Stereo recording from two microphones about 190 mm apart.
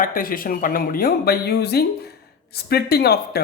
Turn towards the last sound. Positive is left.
turn(degrees=55)  # may be behind; listen again after turning